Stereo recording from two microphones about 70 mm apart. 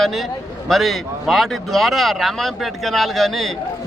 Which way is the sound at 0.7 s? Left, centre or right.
Centre.